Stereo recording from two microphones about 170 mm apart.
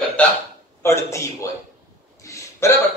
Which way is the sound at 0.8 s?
15° left (ahead or behind).